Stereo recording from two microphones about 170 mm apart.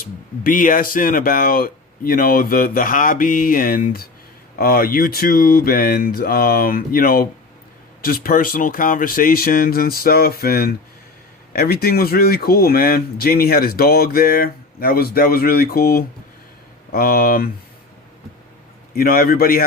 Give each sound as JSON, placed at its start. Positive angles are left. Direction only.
{"t": 0.0, "sound": "speech", "side_deg": 55}
{"t": 18.9, "sound": "speech", "side_deg": 60}